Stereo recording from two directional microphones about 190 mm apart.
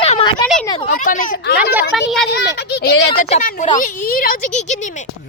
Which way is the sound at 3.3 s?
40° left (ahead or behind).